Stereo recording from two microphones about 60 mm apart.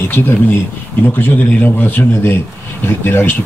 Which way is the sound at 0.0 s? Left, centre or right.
Left.